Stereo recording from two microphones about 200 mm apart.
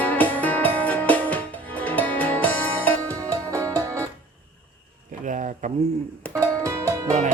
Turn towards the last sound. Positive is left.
turn(degrees=-40)  # may be behind; listen again after turning